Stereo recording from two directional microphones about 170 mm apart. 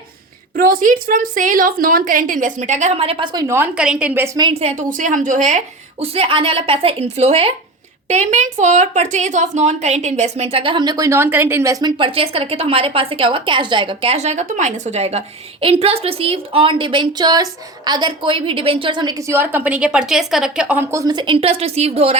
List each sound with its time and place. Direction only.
0.5 s a woman's voice: 55° right (ahead or behind); by 3.2 s 35° right (ahead or behind)
3.3 s speech: 15° right (ahead or behind)
4.8 s a woman's voice: 50° right (ahead or behind)